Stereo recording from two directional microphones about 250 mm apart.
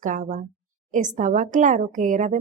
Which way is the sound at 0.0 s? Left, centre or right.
Right.